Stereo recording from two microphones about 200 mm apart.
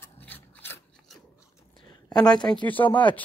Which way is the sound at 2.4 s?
20° left (ahead or behind).